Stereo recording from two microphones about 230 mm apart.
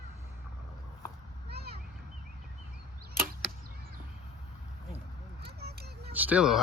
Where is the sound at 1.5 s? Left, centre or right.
Right.